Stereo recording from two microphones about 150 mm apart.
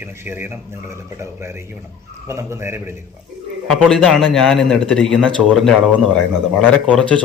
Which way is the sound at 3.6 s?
5° left (ahead or behind).